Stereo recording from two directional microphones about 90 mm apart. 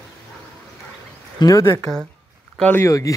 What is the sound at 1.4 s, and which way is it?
Speech, 45° left (ahead or behind).